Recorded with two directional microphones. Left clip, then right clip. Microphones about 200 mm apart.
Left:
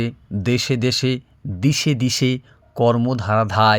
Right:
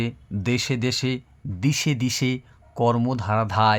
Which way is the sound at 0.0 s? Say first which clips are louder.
Left 4 dB; 15° left (ahead or behind).